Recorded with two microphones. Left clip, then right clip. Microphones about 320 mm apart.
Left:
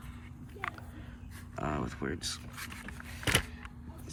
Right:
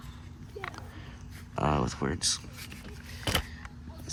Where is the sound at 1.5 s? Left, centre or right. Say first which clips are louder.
Right 7 dB; centre.